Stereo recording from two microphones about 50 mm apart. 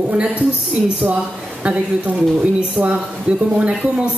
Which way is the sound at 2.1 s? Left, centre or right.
Centre.